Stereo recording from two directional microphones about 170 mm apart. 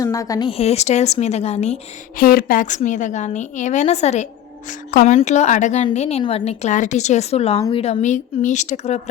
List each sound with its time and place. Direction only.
0.0 s a woman's voice: 20° left (ahead or behind); by 1.8 s 40° left (ahead or behind)
2.1 s a woman's voice: 55° left (ahead or behind); by 9.0 s 40° left (ahead or behind)